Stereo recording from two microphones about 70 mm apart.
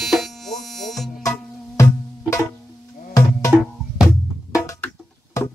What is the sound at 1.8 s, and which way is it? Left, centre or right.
Music, left.